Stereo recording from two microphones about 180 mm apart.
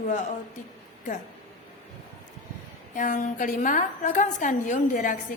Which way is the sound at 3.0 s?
45° left (ahead or behind).